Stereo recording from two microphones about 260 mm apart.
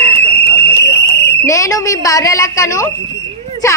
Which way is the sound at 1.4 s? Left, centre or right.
Centre.